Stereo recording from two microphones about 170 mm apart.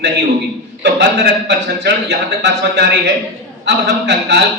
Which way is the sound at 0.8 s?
75° right (ahead or behind).